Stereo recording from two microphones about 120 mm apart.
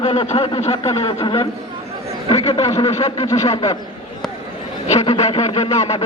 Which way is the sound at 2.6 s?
30° left (ahead or behind).